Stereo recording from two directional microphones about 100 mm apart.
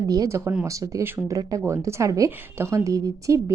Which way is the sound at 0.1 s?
35° right (ahead or behind).